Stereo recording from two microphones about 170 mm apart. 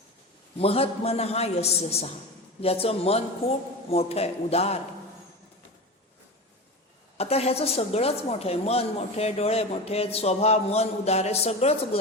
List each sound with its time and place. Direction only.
0.6 s a woman's voice: 35° left (ahead or behind)
7.2 s a woman's voice: 35° left (ahead or behind)